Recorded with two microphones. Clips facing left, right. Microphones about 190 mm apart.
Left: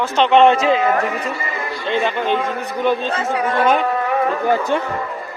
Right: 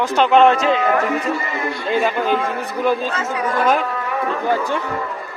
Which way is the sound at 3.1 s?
30° left (ahead or behind).